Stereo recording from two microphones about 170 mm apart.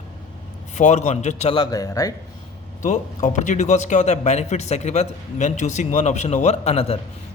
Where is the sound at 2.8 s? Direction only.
45° left (ahead or behind).